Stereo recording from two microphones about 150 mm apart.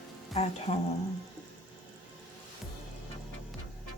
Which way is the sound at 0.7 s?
45° left (ahead or behind).